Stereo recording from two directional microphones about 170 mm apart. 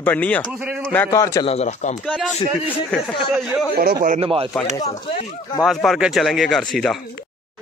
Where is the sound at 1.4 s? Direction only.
40° left (ahead or behind).